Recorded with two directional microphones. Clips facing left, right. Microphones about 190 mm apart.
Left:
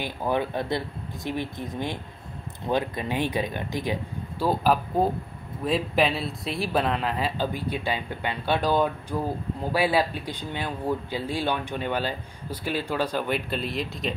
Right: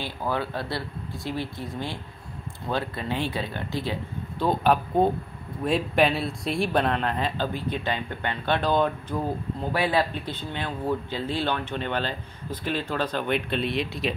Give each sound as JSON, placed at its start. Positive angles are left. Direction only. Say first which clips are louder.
{"t": 0.0, "sound": "speech", "louder": "left 2 dB", "side_deg": 20}
{"t": 4.5, "sound": "speech", "louder": "right 1 dB", "side_deg": 5}